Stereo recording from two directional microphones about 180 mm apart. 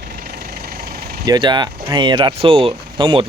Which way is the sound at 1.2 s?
25° right (ahead or behind).